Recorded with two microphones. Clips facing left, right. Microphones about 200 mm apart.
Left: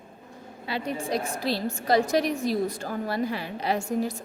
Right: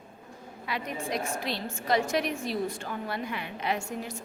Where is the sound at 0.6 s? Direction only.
30° left (ahead or behind).